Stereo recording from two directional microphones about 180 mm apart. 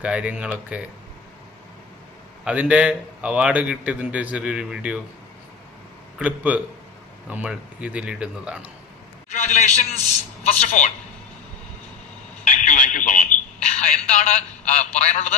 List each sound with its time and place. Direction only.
0.0 s a man's voice: 5° right (ahead or behind)
2.4 s a man's voice: 5° right (ahead or behind)
6.1 s a man's voice: 10° right (ahead or behind)
9.3 s a man's voice: 40° left (ahead or behind)
12.5 s a man's voice: 45° left (ahead or behind)